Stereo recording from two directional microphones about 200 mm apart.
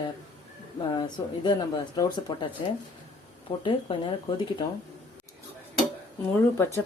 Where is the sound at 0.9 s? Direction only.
20° left (ahead or behind).